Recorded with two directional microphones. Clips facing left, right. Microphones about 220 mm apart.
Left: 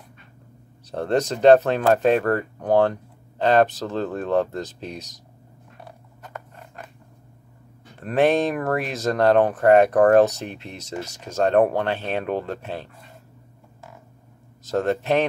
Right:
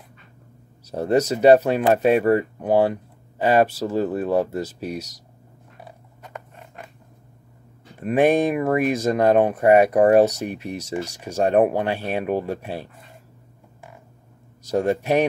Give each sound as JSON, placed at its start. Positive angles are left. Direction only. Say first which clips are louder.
{"t": 0.9, "sound": "speech", "louder": "right 3 dB", "side_deg": -10}
{"t": 5.9, "sound": "creak", "louder": "even", "side_deg": -15}
{"t": 8.0, "sound": "speech", "louder": "right 2 dB", "side_deg": -10}
{"t": 14.6, "sound": "speech", "louder": "right 1 dB", "side_deg": -10}